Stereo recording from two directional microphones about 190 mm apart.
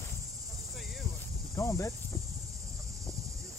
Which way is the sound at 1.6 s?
15° left (ahead or behind).